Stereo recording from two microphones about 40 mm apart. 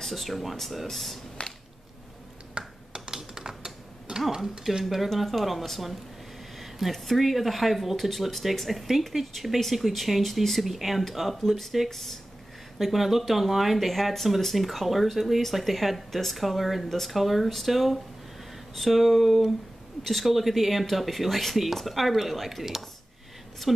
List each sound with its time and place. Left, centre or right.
0.0 s speech: centre
2.5 s finger snapping: centre
3.2 s typing: centre
4.3 s speech: centre